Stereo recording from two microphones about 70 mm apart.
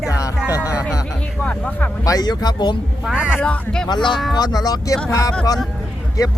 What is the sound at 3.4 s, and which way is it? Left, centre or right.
Speech, centre.